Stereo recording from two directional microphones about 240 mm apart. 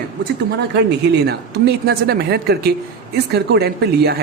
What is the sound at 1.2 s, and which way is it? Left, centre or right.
A woman's voice, right.